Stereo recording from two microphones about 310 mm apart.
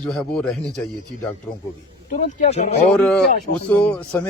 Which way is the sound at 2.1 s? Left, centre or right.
Left.